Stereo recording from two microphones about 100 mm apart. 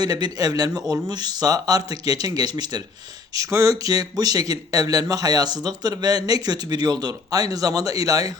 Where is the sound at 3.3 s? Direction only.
35° right (ahead or behind).